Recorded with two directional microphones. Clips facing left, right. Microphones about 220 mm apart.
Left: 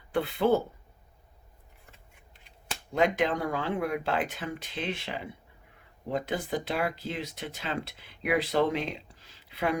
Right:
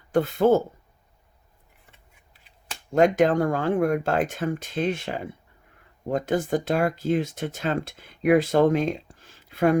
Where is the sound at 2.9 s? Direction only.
45° right (ahead or behind).